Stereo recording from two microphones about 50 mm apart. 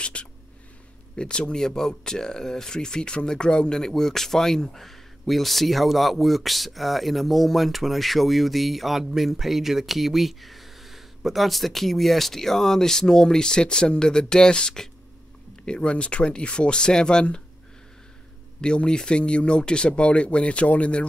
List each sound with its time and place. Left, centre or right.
0.0 s a sound: left
1.1 s speech: centre
18.6 s speech: centre